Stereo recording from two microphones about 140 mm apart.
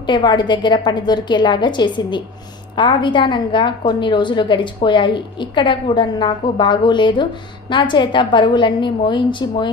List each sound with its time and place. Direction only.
0.0 s a woman's voice: 30° left (ahead or behind)